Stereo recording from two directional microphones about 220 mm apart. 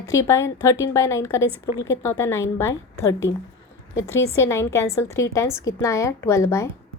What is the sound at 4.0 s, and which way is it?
A woman's voice, 10° left (ahead or behind).